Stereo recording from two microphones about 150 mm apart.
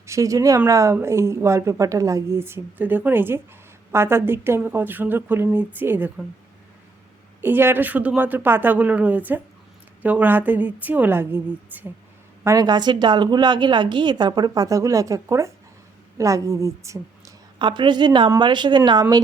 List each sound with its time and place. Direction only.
0.0 s a woman's voice: 20° right (ahead or behind)
7.4 s a woman's voice: 15° right (ahead or behind)
17.7 s a woman's voice: 30° right (ahead or behind)